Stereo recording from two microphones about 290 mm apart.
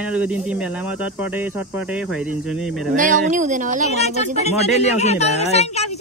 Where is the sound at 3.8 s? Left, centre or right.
Left.